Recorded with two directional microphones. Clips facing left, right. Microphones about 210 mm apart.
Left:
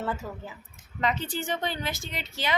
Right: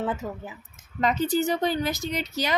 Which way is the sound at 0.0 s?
20° right (ahead or behind).